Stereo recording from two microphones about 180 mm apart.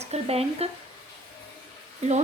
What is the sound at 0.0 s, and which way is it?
Speech, 35° right (ahead or behind).